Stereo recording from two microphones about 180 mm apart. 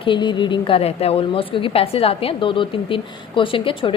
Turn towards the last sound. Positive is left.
turn(degrees=30)  # may be behind; listen again after turning